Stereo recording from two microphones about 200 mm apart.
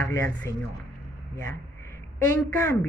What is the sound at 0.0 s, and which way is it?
A man's voice, 10° left (ahead or behind).